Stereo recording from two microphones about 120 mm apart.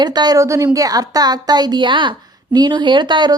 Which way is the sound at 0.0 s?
35° right (ahead or behind).